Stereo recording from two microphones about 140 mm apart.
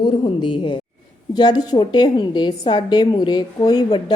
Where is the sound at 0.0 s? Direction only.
35° left (ahead or behind).